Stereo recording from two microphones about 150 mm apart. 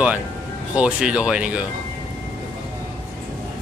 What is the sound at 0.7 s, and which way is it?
Speech, 5° right (ahead or behind).